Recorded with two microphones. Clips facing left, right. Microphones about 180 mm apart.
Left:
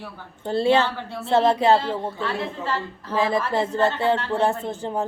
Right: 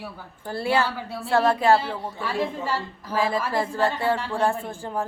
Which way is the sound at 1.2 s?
20° left (ahead or behind).